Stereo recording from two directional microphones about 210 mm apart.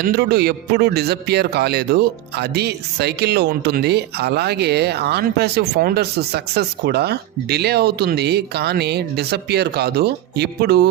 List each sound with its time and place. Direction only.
0.0 s a man's voice: 50° right (ahead or behind)